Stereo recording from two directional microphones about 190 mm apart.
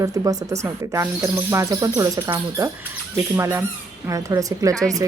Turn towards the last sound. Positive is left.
turn(degrees=-20)  # may be behind; listen again after turning